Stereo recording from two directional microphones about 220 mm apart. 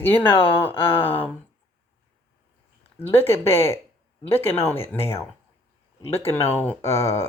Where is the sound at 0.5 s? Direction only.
10° left (ahead or behind).